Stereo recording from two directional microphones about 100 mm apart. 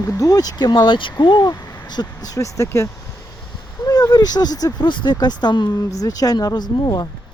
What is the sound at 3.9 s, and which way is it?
Speech, 40° left (ahead or behind).